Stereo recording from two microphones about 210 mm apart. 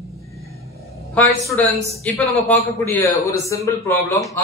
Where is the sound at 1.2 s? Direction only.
5° left (ahead or behind).